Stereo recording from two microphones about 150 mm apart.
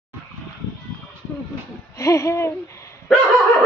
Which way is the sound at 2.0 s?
20° left (ahead or behind).